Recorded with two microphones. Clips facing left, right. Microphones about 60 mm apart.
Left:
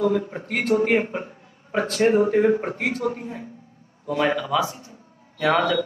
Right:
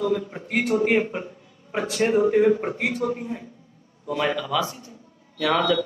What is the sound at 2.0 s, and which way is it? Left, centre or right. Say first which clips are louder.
Speech: left 3 dB; centre.